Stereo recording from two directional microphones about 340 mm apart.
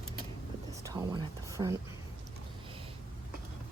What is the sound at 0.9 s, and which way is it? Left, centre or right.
Speech, centre.